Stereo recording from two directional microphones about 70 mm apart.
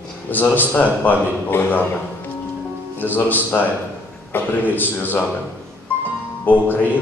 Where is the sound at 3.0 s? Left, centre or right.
Left.